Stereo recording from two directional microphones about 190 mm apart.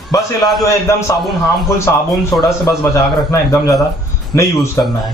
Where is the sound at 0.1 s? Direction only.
15° left (ahead or behind).